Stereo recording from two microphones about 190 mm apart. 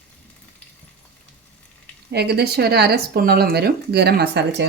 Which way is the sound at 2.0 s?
60° right (ahead or behind).